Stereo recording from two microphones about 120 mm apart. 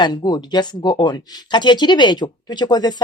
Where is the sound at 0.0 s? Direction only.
35° left (ahead or behind).